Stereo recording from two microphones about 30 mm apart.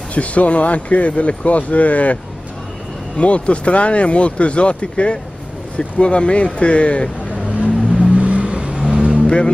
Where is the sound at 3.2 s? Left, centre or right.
Left.